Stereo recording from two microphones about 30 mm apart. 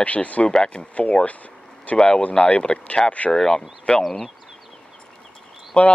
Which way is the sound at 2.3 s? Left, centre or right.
Left.